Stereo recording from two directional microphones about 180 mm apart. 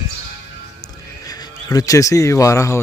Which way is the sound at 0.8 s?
20° left (ahead or behind).